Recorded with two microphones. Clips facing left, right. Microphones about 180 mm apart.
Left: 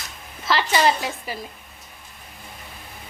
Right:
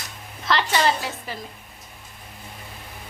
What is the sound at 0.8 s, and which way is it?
Speech, 15° left (ahead or behind).